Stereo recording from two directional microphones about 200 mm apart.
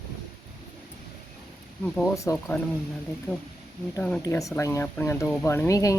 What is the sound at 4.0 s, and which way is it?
Speech, 5° left (ahead or behind).